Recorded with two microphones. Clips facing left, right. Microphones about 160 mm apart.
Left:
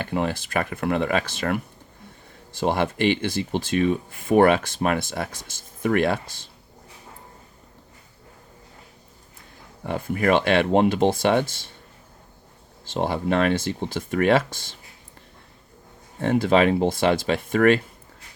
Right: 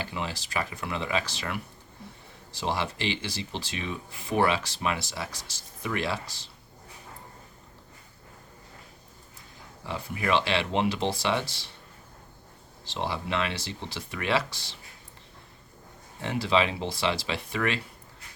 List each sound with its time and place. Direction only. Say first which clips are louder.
0.0 s speech: left 9 dB; 55° left (ahead or behind)
9.8 s speech: left 9 dB; 50° left (ahead or behind)
12.8 s speech: left 8 dB; 50° left (ahead or behind)
16.2 s speech: left 7 dB; 50° left (ahead or behind)